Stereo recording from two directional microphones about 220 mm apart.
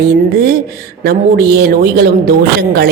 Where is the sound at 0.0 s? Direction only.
45° right (ahead or behind).